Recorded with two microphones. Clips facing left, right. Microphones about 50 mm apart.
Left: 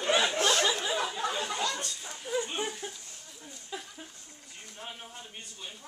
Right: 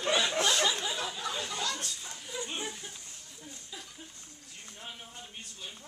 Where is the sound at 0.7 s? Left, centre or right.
Left.